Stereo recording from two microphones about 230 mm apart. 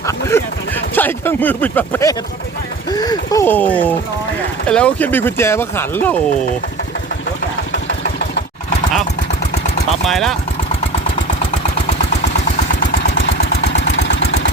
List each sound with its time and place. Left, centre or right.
0.0 s a sound: centre
0.9 s speech: centre
2.9 s a sound: centre
4.7 s speech: centre
10.1 s speech: centre
13.7 s engine: left